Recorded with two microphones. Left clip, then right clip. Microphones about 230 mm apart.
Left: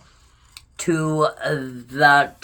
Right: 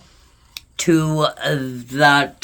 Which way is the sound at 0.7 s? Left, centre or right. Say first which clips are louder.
Right 3 dB; right.